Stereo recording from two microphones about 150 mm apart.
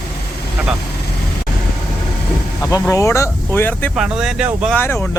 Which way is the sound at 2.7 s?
20° left (ahead or behind).